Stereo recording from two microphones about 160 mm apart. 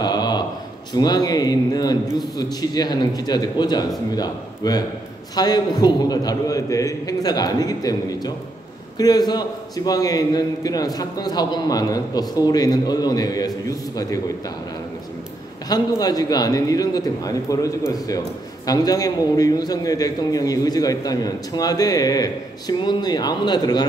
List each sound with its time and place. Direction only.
0.0 s a sound: 25° left (ahead or behind)
0.9 s a man's voice: 25° left (ahead or behind)
15.7 s a man's voice: 25° left (ahead or behind)